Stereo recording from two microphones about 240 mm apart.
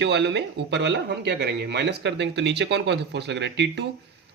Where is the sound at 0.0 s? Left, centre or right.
Right.